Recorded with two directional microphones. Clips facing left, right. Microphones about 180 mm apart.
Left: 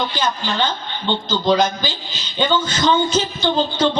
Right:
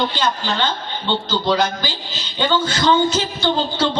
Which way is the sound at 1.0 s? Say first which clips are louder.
Left 2 dB; 15° left (ahead or behind).